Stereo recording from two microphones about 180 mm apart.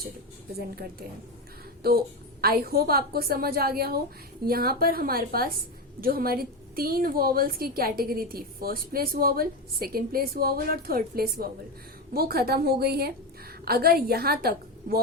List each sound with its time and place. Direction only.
1.8 s a woman's voice: 55° right (ahead or behind)